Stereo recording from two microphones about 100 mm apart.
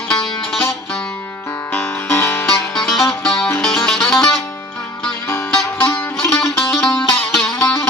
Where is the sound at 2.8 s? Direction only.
Centre (ahead or behind).